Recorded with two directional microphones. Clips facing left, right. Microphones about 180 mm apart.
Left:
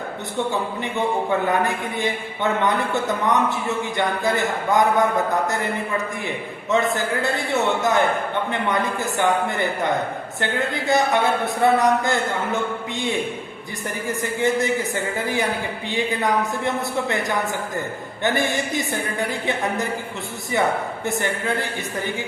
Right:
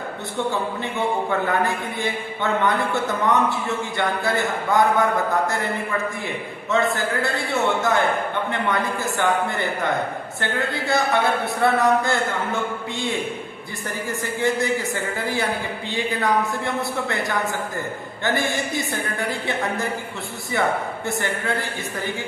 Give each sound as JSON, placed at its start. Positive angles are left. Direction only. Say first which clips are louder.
{"t": 0.3, "sound": "a man's voice", "louder": "even", "side_deg": 20}
{"t": 6.2, "sound": "a man's voice", "louder": "left 1 dB", "side_deg": 20}
{"t": 14.1, "sound": "a man's voice", "louder": "left 2 dB", "side_deg": 20}